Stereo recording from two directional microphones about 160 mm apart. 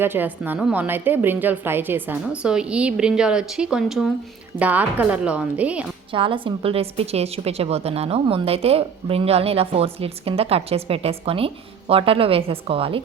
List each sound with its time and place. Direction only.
0.0 s a woman's voice: 10° right (ahead or behind)
6.1 s a woman's voice: 35° right (ahead or behind)